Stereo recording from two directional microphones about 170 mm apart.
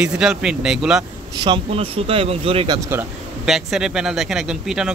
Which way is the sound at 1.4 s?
30° right (ahead or behind).